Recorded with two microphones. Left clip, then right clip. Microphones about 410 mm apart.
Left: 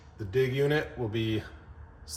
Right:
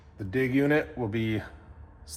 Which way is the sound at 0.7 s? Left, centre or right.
Centre.